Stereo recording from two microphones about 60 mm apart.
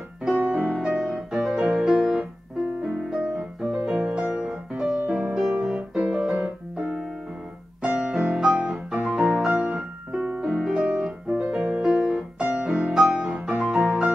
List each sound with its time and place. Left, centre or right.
0.4 s music: right
0.8 s music: centre
6.3 s piano: centre
7.8 s music: centre
11.8 s piano: centre
12.9 s music: centre